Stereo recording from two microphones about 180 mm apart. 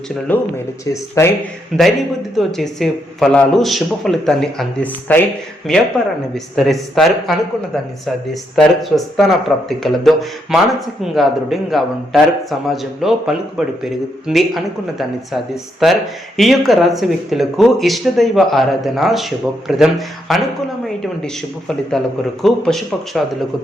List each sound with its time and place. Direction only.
0.3 s speech: 10° left (ahead or behind)
1.7 s speech: centre (ahead or behind)
21.8 s speech: centre (ahead or behind)